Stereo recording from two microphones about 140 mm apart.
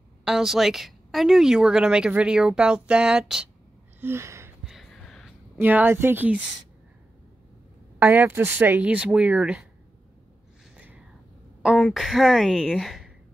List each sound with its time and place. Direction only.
0.2 s a woman's voice: 5° right (ahead or behind)
4.0 s gasp: 20° right (ahead or behind)
4.6 s a sound: centre (ahead or behind)
5.6 s speech: 15° right (ahead or behind)
8.0 s speech: 15° right (ahead or behind)
11.7 s a woman's voice: 5° left (ahead or behind)